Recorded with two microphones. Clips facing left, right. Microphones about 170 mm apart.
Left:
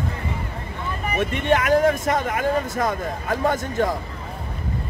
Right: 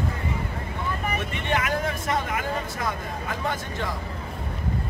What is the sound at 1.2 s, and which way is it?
Speech, 50° left (ahead or behind).